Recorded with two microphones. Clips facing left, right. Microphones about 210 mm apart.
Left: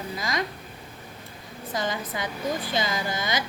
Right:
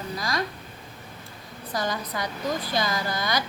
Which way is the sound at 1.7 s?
20° left (ahead or behind).